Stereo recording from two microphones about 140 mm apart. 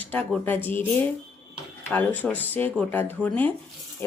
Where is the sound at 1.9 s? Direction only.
10° left (ahead or behind).